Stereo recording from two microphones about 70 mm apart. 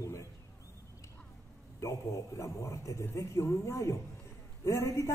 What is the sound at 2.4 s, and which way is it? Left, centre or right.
A man's voice, left.